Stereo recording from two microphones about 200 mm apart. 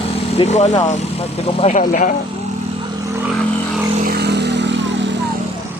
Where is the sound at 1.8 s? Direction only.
40° left (ahead or behind).